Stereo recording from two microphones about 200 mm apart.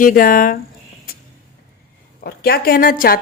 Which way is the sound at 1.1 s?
45° left (ahead or behind).